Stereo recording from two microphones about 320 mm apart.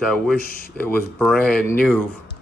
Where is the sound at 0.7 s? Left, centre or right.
Centre.